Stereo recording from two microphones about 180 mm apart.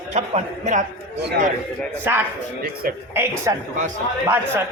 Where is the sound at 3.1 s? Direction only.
15° right (ahead or behind).